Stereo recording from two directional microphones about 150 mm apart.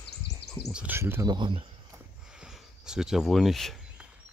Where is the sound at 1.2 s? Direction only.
30° right (ahead or behind).